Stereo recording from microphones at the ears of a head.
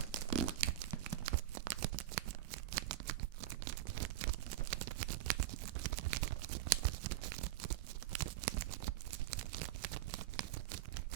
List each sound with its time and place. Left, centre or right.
0.0 s tearing: right